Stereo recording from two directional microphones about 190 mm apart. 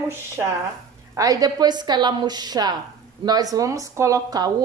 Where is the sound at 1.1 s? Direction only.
20° right (ahead or behind).